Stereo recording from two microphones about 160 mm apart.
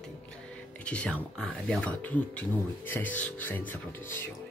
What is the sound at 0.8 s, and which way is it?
Speech, 5° left (ahead or behind).